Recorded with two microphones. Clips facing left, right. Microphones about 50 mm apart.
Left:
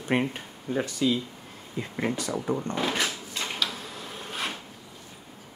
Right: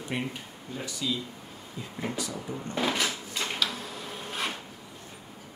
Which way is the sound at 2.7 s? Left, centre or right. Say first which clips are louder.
Even; centre.